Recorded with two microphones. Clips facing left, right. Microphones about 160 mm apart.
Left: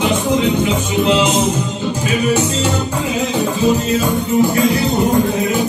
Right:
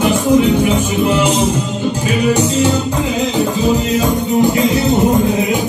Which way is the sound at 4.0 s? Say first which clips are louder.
Right 2 dB; 20° right (ahead or behind).